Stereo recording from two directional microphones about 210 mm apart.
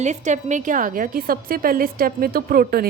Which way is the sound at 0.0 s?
35° right (ahead or behind).